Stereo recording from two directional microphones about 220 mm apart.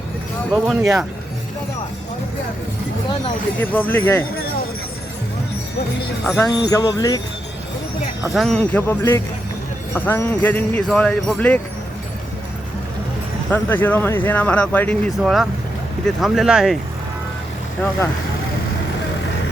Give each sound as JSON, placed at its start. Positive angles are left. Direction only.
{"t": 0.5, "sound": "speech", "side_deg": -10}
{"t": 3.6, "sound": "speech", "side_deg": 10}
{"t": 6.5, "sound": "speech", "side_deg": 15}
{"t": 8.2, "sound": "speech", "side_deg": 0}
{"t": 13.5, "sound": "speech", "side_deg": 10}